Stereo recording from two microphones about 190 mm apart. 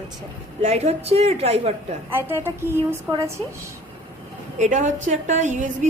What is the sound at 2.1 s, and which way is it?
A woman's voice, 10° right (ahead or behind).